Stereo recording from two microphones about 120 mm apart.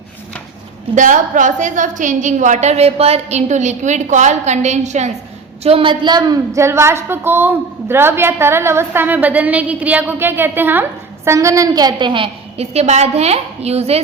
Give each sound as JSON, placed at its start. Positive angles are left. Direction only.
{"t": 0.9, "sound": "a woman's voice", "side_deg": -90}
{"t": 5.6, "sound": "a woman's voice", "side_deg": -50}